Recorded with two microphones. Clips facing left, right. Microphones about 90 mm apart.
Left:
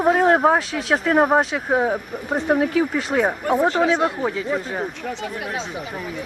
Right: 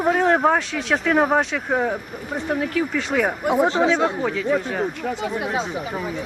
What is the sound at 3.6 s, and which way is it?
Speech, 25° right (ahead or behind).